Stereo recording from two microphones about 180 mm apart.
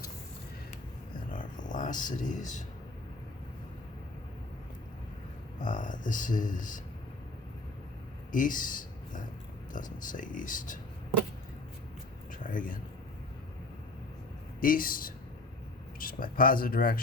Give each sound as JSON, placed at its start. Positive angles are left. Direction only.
{"t": 1.3, "sound": "a sound", "side_deg": 45}
{"t": 5.5, "sound": "speech", "side_deg": 45}
{"t": 8.3, "sound": "speech", "side_deg": 50}
{"t": 12.3, "sound": "speech", "side_deg": 50}
{"t": 14.6, "sound": "speech", "side_deg": 50}